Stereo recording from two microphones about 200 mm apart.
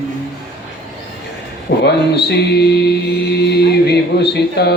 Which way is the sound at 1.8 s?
55° left (ahead or behind).